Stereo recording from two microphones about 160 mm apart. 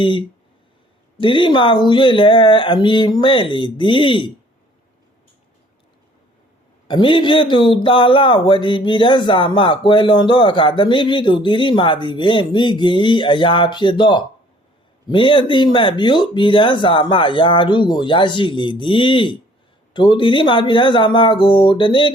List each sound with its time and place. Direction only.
0.0 s speech: 30° left (ahead or behind)
6.8 s speech: 30° left (ahead or behind)